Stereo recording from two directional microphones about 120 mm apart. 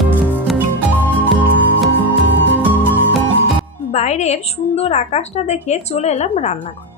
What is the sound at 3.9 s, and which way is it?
A woman's voice, 70° left (ahead or behind).